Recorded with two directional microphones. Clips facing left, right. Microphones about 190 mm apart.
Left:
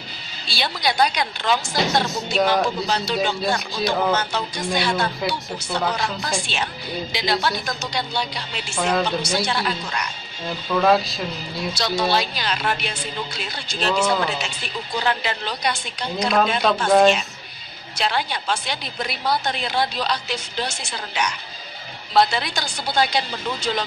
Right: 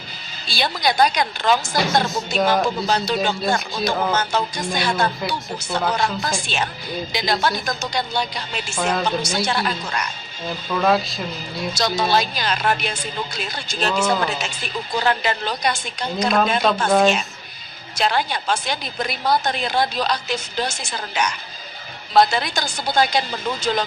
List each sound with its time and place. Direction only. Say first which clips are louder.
0.5 s a woman's voice: right 3 dB; 45° right (ahead or behind)
3.3 s a woman's voice: right 2 dB; 45° right (ahead or behind)
8.7 s speech: left 1 dB; 5° right (ahead or behind)
9.0 s a woman's voice: right 1 dB; 45° right (ahead or behind)
10.8 s speech: left 1 dB; centre (ahead or behind)
11.7 s a woman's voice: right 2 dB; 45° right (ahead or behind)
16.6 s speech: left 3 dB; centre (ahead or behind)
17.9 s a woman's voice: right 3 dB; 45° right (ahead or behind)